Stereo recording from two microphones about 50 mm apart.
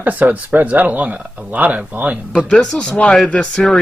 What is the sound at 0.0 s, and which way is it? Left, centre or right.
Speech, right.